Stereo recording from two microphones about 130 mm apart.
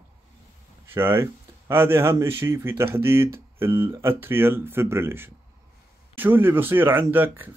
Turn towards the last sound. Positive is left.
turn(degrees=-15)  # may be behind; listen again after turning